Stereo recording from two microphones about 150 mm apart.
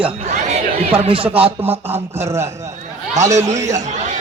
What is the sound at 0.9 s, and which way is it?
Speech, 35° right (ahead or behind).